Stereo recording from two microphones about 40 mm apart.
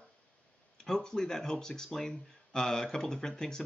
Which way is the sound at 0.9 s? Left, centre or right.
Centre.